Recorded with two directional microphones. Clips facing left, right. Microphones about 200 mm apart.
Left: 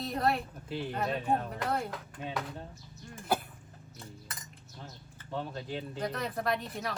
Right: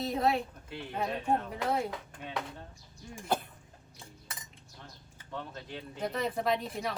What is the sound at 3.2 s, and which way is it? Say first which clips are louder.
Throat clearing: left 1 dB; 5° left (ahead or behind).